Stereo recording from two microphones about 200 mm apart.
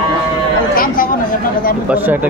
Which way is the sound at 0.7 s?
45° left (ahead or behind).